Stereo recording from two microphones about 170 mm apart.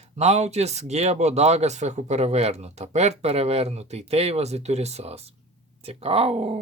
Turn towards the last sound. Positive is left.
turn(degrees=-35)  # may be behind; listen again after turning